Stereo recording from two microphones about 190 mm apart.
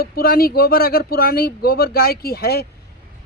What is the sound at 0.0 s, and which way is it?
Speech, 50° left (ahead or behind).